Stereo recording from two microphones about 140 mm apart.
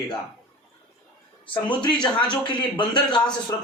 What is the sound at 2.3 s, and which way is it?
Speech, 35° left (ahead or behind).